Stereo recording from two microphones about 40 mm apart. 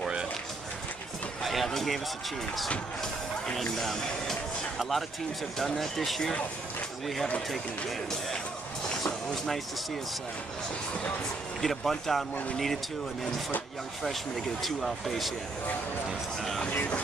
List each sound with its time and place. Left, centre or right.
1.4 s speech: centre
3.6 s speech: centre
8.8 s vehicle: centre
11.6 s speech: centre
14.6 s speech: centre